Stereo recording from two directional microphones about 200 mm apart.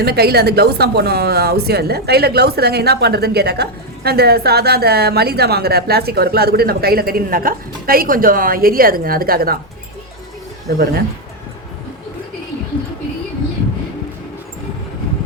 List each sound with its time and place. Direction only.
0.0 s speech: 50° right (ahead or behind)
10.7 s speech: 50° right (ahead or behind)